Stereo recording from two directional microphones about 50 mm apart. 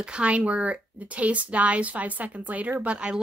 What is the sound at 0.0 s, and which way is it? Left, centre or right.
Speech, right.